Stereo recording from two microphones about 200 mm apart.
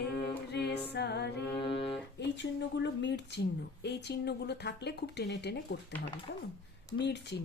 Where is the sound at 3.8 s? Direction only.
55° left (ahead or behind).